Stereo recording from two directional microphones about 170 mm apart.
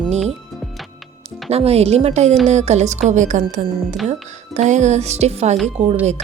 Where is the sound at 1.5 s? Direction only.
35° right (ahead or behind).